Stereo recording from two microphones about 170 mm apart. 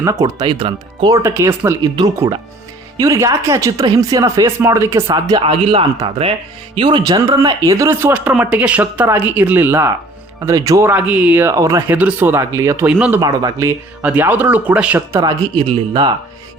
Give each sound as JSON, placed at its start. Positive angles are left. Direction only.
{"t": 0.0, "sound": "speech", "side_deg": -20}
{"t": 13.1, "sound": "speech", "side_deg": -20}